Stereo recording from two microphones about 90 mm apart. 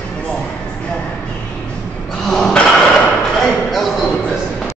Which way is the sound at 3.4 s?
5° left (ahead or behind).